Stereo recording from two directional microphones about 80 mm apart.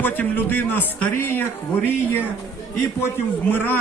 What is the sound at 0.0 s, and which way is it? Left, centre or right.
A man's voice, left.